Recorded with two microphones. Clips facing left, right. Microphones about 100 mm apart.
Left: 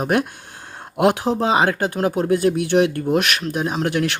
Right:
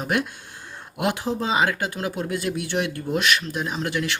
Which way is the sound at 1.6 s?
45° left (ahead or behind).